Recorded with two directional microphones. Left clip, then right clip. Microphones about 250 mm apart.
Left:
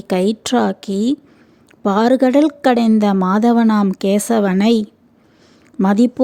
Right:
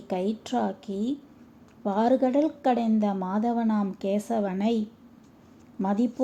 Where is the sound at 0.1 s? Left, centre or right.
Left.